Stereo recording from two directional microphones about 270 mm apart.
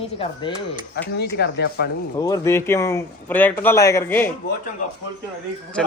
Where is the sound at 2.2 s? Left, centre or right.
Centre.